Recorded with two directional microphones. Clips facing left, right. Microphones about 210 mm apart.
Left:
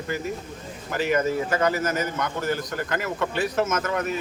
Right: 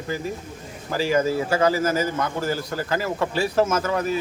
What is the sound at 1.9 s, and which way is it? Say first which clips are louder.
Speech: right 3 dB; 30° right (ahead or behind).